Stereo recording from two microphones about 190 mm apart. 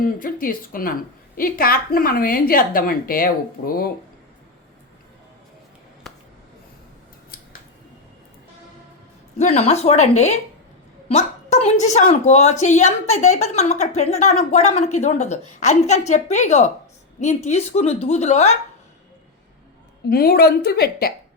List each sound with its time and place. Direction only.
0.0 s a woman's voice: 45° left (ahead or behind)
7.3 s scissors: 50° left (ahead or behind)
9.4 s a woman's voice: 35° left (ahead or behind)
20.1 s a woman's voice: 55° left (ahead or behind)